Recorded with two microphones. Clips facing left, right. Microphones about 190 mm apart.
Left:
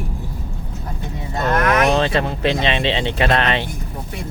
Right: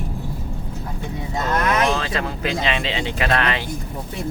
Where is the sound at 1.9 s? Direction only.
25° left (ahead or behind).